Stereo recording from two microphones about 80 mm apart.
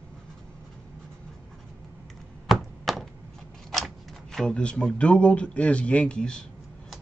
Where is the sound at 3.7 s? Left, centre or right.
Centre.